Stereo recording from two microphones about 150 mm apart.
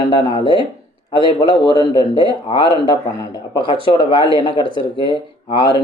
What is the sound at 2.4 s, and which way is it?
Speech, 30° left (ahead or behind).